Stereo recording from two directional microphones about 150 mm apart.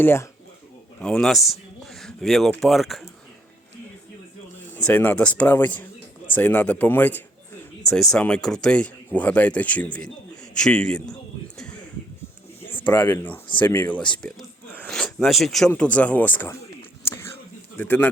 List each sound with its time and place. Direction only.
0.0 s speech: 15° left (ahead or behind)
1.0 s speech: centre (ahead or behind)
4.7 s speech: 10° left (ahead or behind)
10.5 s a sound: 5° left (ahead or behind)
12.8 s speech: 10° left (ahead or behind)
17.0 s whispering: 15° left (ahead or behind)
17.7 s speech: 10° left (ahead or behind)